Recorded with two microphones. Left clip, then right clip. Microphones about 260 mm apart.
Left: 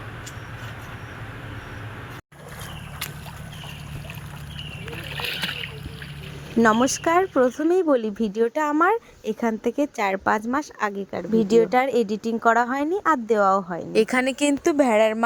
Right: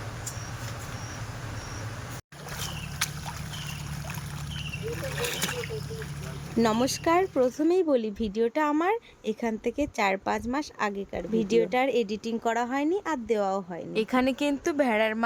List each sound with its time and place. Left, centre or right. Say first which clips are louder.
5.0 s splash: left 4 dB; centre
6.6 s speech: left 7 dB; left